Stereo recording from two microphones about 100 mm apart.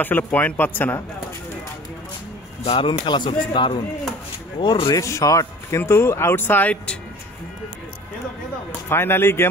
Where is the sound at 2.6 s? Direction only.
90° left.